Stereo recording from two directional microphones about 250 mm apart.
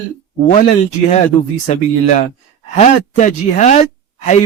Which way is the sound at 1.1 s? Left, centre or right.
Left.